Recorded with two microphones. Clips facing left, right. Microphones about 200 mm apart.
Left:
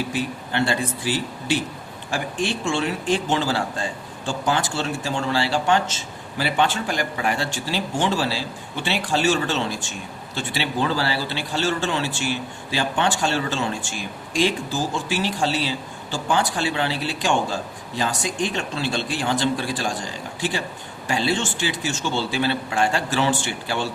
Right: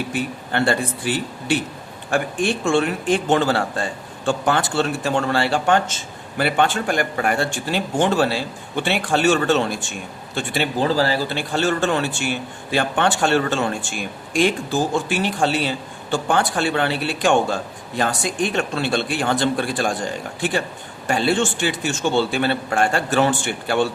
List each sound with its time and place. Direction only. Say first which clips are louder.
0.1 s speech: right 2 dB; 55° right (ahead or behind)
10.8 s speech: right 4 dB; 40° right (ahead or behind); by 23.9 s 55° right (ahead or behind)